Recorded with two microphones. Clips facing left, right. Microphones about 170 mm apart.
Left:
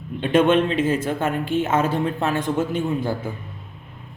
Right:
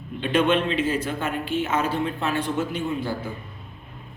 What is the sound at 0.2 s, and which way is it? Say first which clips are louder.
Speech: left 4 dB; 50° left (ahead or behind).